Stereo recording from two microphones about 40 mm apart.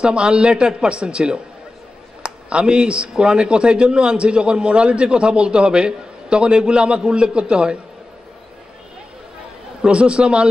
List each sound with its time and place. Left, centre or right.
0.0 s speech: right
9.8 s speech: right